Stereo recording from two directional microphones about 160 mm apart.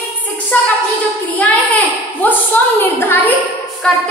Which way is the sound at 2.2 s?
10° left (ahead or behind).